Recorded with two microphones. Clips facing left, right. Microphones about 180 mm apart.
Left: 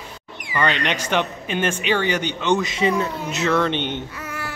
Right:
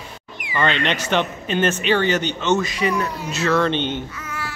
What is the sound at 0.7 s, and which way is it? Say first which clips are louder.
A man's voice: right 1 dB; 15° left (ahead or behind).